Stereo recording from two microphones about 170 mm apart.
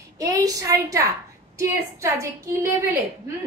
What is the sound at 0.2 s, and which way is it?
A woman's voice, 20° right (ahead or behind).